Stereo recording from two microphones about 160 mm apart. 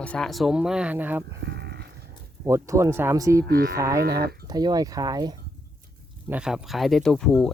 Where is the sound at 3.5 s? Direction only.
70° right (ahead or behind).